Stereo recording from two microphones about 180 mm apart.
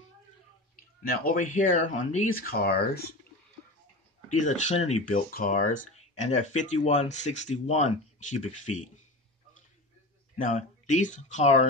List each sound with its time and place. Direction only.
0.7 s speech: 50° left (ahead or behind)
2.5 s speech: 60° left (ahead or behind)
4.3 s speech: 40° left (ahead or behind)
10.3 s speech: 45° left (ahead or behind)